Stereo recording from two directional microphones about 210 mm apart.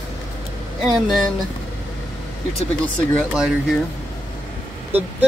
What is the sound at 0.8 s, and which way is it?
Speech, centre (ahead or behind).